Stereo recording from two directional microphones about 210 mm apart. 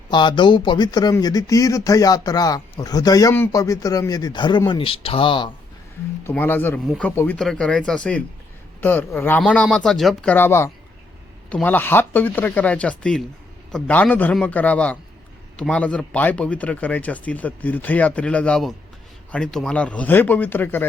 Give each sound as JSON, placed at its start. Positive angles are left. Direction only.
{"t": 0.1, "sound": "speech", "side_deg": 20}
{"t": 6.2, "sound": "speech", "side_deg": 10}